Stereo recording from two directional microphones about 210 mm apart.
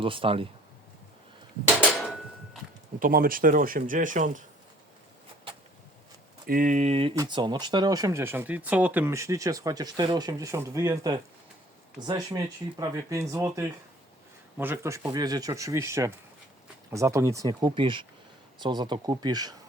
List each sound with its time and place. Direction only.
0.0 s speech: 25° right (ahead or behind)
1.6 s a sound: centre (ahead or behind)
3.0 s speech: 45° right (ahead or behind)
6.5 s speech: 40° right (ahead or behind); by 19.5 s 20° right (ahead or behind)